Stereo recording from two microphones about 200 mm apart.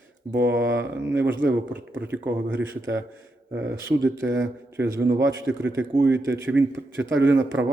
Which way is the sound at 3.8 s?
10° right (ahead or behind).